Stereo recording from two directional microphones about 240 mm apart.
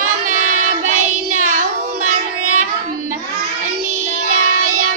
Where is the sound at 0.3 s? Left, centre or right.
Right.